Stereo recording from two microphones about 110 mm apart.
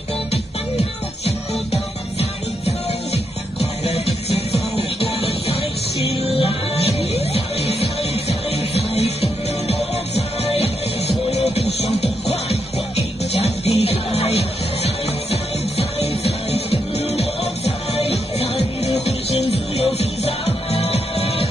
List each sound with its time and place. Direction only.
1.2 s music: 70° left (ahead or behind)